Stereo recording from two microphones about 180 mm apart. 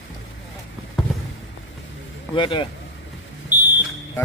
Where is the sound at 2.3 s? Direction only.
25° left (ahead or behind).